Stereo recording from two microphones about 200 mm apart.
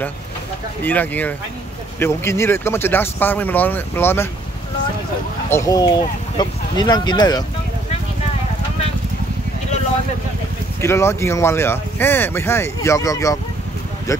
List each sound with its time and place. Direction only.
0.8 s speech: 10° left (ahead or behind)
5.5 s speech: 20° left (ahead or behind)
10.8 s speech: 15° left (ahead or behind)